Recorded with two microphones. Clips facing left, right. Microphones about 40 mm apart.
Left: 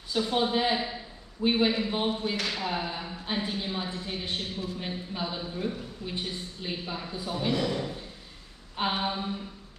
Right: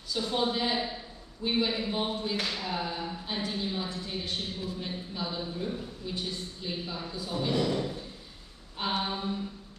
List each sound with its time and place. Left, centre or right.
0.1 s a man's voice: left
7.3 s speech: centre